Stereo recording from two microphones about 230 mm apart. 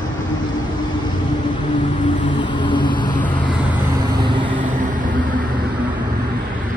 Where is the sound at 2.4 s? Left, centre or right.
Centre.